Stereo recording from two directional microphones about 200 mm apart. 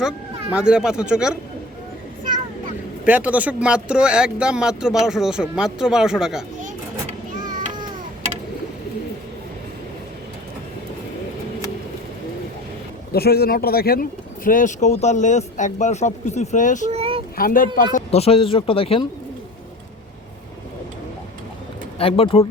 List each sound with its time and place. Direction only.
0.5 s speech: 5° right (ahead or behind)
3.1 s speech: 5° right (ahead or behind)
7.4 s children playing: 40° right (ahead or behind)
13.1 s speech: 50° left (ahead or behind)
16.9 s a sound: 30° right (ahead or behind)
17.3 s speech: 45° left (ahead or behind)
17.9 s speech: 30° left (ahead or behind)
21.9 s speech: 30° left (ahead or behind)